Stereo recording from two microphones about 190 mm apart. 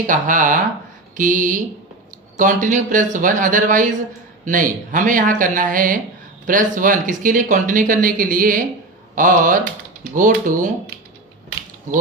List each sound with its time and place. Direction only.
0.1 s speech: 45° right (ahead or behind)